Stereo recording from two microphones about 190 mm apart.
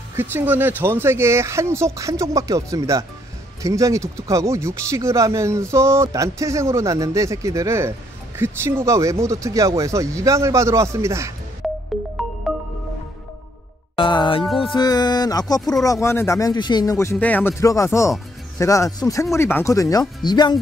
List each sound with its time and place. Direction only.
0.1 s speech: 10° right (ahead or behind)
11.6 s music: centre (ahead or behind)
13.9 s music: 25° left (ahead or behind)
15.7 s speech: 20° left (ahead or behind)
20.2 s music: 20° left (ahead or behind)